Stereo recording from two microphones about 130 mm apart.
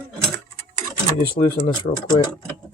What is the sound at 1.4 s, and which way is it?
Speech, 90° left.